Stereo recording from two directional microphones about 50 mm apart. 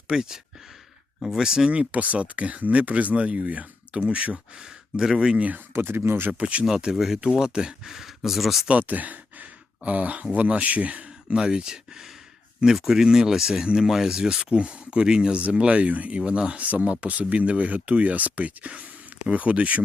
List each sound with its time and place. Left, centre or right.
0.1 s speech: centre
1.9 s speech: right
4.5 s speech: centre
5.4 s speech: right
5.7 s speech: right
6.3 s speech: right
6.7 s speech: centre
7.9 s speech: centre
8.8 s speech: right